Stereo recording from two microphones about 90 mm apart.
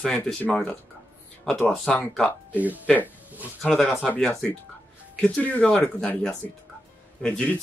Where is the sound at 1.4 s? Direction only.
10° left (ahead or behind).